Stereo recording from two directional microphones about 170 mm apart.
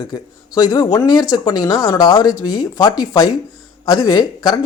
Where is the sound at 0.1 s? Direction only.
25° left (ahead or behind).